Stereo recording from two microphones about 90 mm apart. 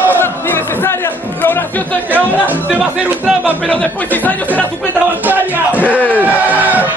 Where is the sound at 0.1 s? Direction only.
25° left (ahead or behind).